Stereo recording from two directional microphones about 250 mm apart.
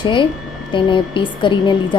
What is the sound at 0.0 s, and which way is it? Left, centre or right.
A woman's voice, centre.